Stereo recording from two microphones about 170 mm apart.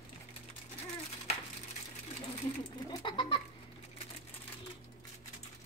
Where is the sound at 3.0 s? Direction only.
30° left (ahead or behind).